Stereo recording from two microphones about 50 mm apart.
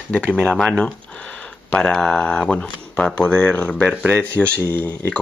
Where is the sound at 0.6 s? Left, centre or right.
Centre.